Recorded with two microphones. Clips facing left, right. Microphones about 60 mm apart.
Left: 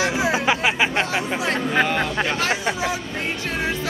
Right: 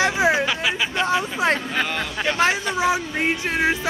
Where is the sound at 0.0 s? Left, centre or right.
Right.